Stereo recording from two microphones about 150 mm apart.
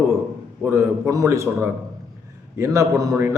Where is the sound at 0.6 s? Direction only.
15° right (ahead or behind).